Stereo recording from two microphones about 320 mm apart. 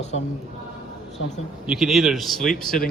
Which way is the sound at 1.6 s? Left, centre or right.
Centre.